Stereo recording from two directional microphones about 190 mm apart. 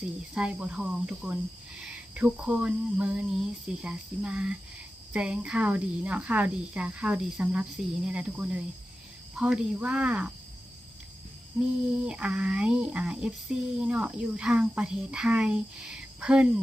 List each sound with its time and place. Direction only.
0.3 s speech: 5° right (ahead or behind)
12.0 s speech: 5° right (ahead or behind)